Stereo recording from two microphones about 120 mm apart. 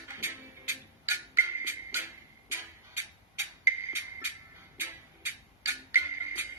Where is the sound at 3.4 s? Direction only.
20° right (ahead or behind).